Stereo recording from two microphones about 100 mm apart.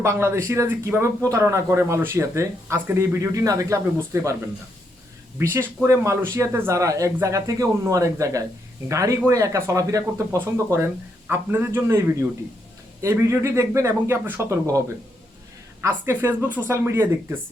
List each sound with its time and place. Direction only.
0.0 s speech: 25° right (ahead or behind)
5.4 s speech: 25° right (ahead or behind)
15.8 s speech: 25° right (ahead or behind)
16.7 s speech: 30° right (ahead or behind)